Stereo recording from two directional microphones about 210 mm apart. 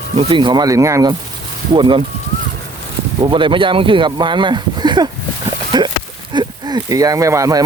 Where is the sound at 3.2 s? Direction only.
25° right (ahead or behind).